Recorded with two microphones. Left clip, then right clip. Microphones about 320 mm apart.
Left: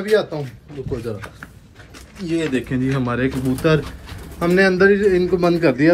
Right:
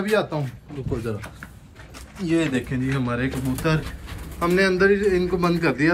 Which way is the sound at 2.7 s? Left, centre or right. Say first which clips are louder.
Left 4 dB; centre.